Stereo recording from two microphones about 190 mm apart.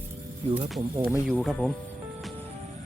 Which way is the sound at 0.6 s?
25° right (ahead or behind).